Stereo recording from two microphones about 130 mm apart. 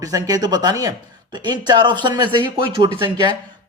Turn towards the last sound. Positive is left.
turn(degrees=-40)  # may be behind; listen again after turning